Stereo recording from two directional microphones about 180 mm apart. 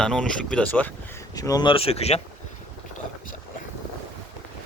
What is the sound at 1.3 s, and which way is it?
Speech, 20° left (ahead or behind).